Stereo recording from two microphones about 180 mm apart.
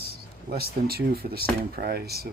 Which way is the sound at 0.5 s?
60° right (ahead or behind).